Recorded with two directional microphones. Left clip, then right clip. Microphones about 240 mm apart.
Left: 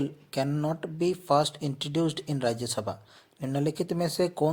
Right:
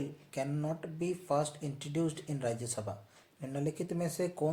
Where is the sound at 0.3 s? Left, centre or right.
Left.